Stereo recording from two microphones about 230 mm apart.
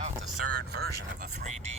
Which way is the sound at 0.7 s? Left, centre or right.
Right.